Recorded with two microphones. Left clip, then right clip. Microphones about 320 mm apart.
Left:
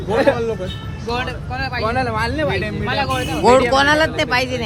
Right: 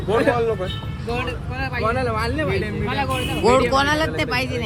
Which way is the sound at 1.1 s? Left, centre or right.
Left.